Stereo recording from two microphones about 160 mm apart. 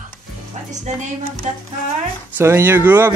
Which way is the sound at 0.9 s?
45° right (ahead or behind).